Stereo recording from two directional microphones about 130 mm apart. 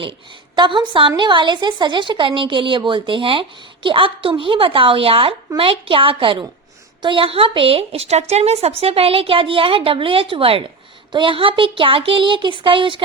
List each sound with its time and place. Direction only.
0.0 s a woman's voice: 40° right (ahead or behind)